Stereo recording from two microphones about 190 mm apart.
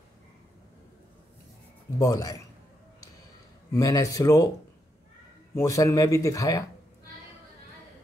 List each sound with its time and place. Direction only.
2.0 s speech: 20° left (ahead or behind)
3.7 s speech: 15° left (ahead or behind)
5.5 s speech: 15° left (ahead or behind)